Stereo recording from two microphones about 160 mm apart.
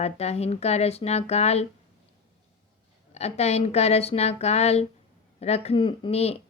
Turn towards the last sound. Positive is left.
turn(degrees=40)  # may be behind; listen again after turning